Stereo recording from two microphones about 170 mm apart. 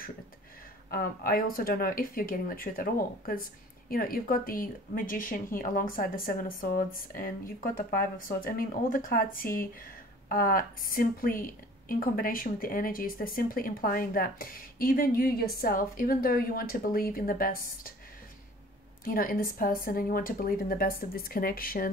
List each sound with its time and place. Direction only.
0.8 s a woman's voice: 60° left (ahead or behind)
19.0 s a woman's voice: 55° left (ahead or behind)